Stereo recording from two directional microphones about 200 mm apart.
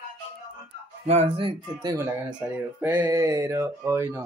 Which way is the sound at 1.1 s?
30° right (ahead or behind).